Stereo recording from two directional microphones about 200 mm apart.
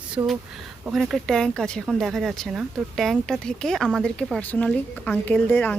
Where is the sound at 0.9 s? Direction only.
Centre (ahead or behind).